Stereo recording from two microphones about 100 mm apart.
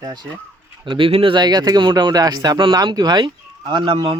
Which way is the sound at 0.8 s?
60° right (ahead or behind).